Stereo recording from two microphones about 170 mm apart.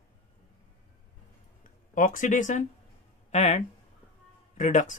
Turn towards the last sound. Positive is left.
turn(degrees=45)  # may be behind; listen again after turning